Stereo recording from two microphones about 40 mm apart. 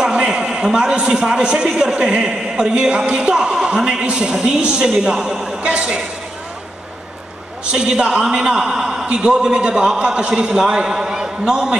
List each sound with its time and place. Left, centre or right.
0.3 s a sound: centre
0.7 s a man's voice: right
4.3 s a man's voice: centre
7.7 s a man's voice: right